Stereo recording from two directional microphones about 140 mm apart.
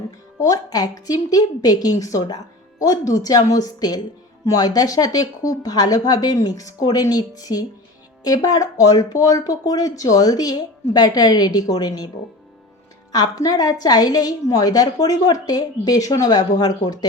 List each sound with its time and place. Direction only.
0.3 s a woman's voice: 25° left (ahead or behind)
13.1 s a woman's voice: 25° left (ahead or behind)